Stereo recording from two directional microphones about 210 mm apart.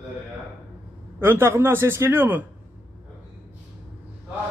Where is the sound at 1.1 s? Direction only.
10° right (ahead or behind).